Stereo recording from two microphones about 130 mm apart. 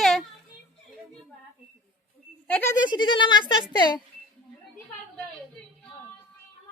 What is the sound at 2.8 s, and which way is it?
Speech, 35° left (ahead or behind).